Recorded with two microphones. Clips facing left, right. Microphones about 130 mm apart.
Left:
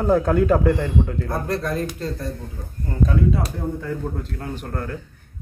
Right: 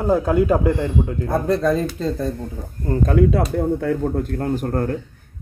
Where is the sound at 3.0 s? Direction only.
70° right (ahead or behind).